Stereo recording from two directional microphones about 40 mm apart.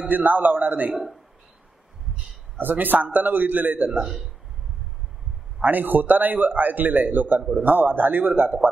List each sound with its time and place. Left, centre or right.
0.1 s a man's voice: right
2.6 s a man's voice: right
5.6 s a man's voice: right